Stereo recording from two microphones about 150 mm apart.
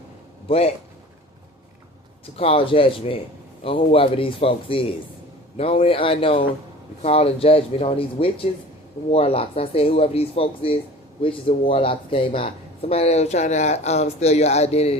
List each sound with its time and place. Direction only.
0.4 s speech: 40° left (ahead or behind)
2.4 s speech: 40° left (ahead or behind)